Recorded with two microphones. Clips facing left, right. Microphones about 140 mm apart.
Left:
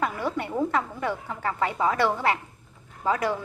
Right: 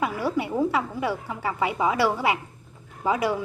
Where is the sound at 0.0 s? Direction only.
5° right (ahead or behind).